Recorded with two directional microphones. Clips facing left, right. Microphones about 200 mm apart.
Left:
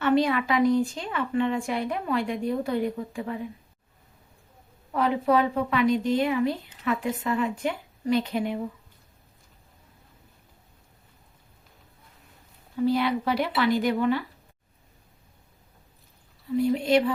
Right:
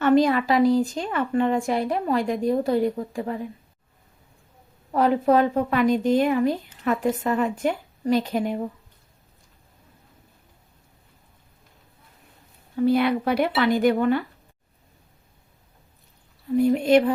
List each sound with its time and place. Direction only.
0.0 s a woman's voice: 45° right (ahead or behind)
4.9 s a woman's voice: 40° right (ahead or behind)
12.8 s a woman's voice: 55° right (ahead or behind)
16.6 s a woman's voice: 50° right (ahead or behind)